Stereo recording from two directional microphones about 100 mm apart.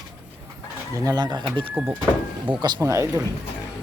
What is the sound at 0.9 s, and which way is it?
Speech, 40° right (ahead or behind).